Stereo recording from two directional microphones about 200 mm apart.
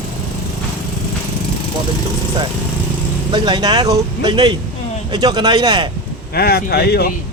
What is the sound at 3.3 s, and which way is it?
Speech, 20° right (ahead or behind).